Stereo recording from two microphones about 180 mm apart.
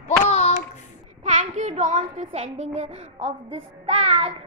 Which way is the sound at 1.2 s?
40° right (ahead or behind).